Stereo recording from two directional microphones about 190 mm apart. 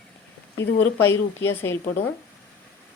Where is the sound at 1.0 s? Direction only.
10° left (ahead or behind).